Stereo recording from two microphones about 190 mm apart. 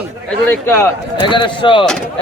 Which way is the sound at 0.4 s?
10° left (ahead or behind).